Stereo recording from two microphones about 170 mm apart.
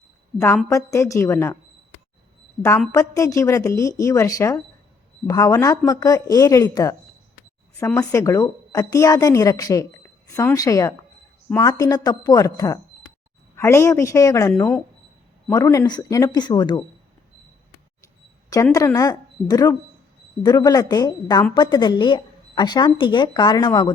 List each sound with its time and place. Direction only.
0.3 s a woman's voice: 15° left (ahead or behind)
2.6 s a woman's voice: 15° left (ahead or behind)
18.5 s a woman's voice: 20° left (ahead or behind)